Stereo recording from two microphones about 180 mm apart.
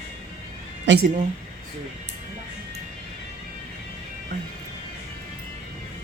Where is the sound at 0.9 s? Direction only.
90° right.